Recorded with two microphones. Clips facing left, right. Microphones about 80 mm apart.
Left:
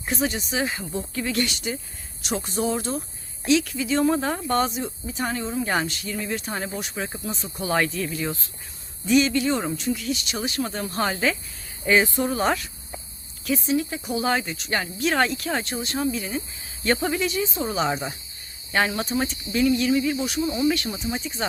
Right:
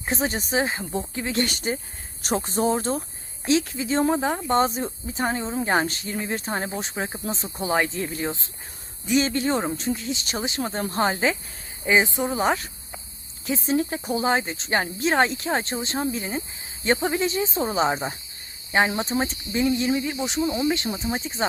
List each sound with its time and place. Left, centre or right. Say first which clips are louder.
0.0 s speech: even; right
1.5 s speech: right 3 dB; right
4.1 s speech: right 1 dB; centre
7.9 s speech: even; right
13.7 s speech: right 4 dB; right